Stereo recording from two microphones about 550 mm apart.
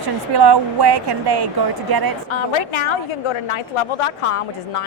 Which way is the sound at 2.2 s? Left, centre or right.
Left.